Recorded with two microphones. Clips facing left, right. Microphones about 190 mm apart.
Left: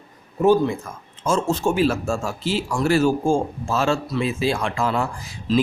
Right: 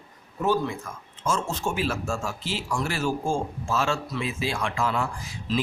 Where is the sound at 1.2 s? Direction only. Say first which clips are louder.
Left 7 dB; 30° left (ahead or behind).